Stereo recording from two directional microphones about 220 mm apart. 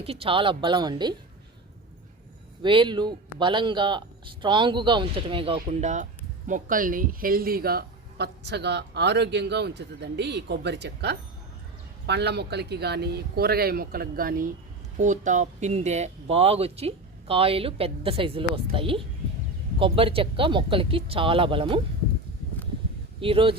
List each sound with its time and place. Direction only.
0.0 s speech: 25° right (ahead or behind)
2.6 s speech: 20° right (ahead or behind)
23.2 s speech: 25° right (ahead or behind)